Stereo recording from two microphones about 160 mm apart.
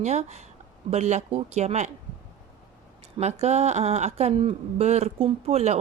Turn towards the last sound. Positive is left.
turn(degrees=-40)  # may be behind; listen again after turning